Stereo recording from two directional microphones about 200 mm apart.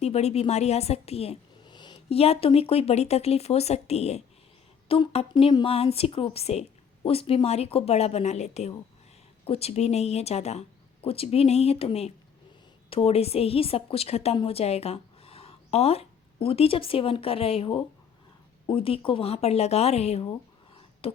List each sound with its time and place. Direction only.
0.0 s a woman's voice: 30° left (ahead or behind)
21.0 s beatboxing: 30° left (ahead or behind)